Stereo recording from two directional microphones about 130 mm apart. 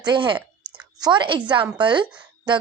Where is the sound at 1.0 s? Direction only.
35° right (ahead or behind).